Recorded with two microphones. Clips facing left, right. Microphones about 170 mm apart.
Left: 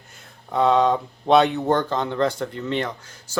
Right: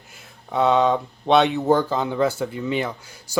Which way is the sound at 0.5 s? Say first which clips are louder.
Even; centre (ahead or behind).